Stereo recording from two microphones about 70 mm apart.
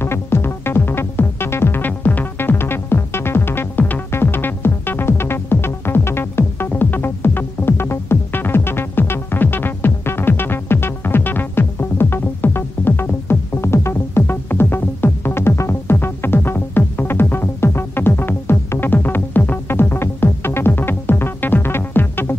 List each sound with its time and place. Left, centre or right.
0.0 s music: left